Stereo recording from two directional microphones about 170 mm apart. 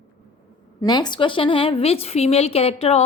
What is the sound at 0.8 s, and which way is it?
A woman's voice, 25° left (ahead or behind).